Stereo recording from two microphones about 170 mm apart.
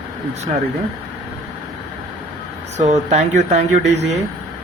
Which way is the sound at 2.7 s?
40° right (ahead or behind).